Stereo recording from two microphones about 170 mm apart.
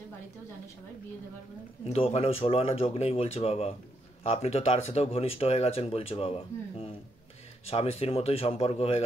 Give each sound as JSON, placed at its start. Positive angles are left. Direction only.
{"t": 1.9, "sound": "speech", "side_deg": 35}